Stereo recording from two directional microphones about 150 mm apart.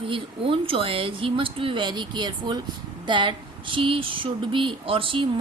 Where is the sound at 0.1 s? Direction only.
35° right (ahead or behind).